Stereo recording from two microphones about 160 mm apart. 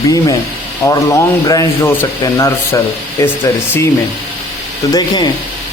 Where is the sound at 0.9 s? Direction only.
20° left (ahead or behind).